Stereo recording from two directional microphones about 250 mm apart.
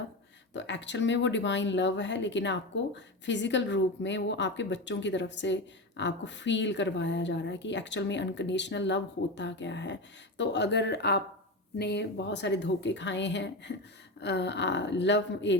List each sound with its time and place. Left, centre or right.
0.5 s a woman's voice: left